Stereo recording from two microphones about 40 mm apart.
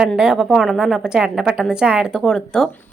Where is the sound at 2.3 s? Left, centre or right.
Centre.